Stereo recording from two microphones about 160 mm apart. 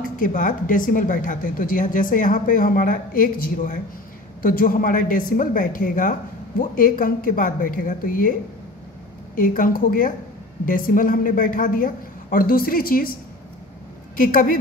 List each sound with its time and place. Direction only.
0.0 s speech: 55° left (ahead or behind)